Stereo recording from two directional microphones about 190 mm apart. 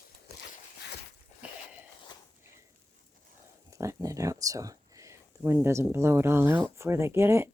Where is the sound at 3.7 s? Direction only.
15° right (ahead or behind).